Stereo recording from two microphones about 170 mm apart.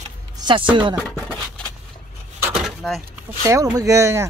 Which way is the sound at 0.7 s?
30° right (ahead or behind).